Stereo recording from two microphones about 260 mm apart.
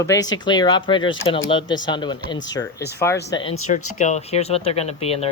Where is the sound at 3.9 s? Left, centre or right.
Left.